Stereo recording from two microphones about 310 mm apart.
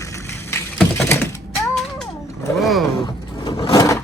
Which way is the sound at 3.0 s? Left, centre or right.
Centre.